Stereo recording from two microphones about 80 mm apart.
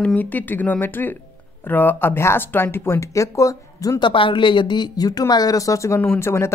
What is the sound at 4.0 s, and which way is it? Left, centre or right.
Speech, left.